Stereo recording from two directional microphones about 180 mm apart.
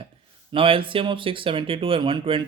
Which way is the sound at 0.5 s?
30° right (ahead or behind).